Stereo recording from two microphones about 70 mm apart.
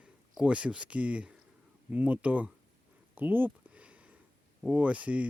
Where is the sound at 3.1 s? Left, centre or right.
Right.